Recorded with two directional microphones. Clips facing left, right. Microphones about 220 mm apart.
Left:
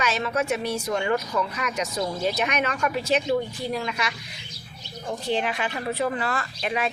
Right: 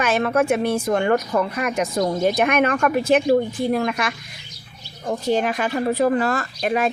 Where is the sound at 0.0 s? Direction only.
55° right (ahead or behind).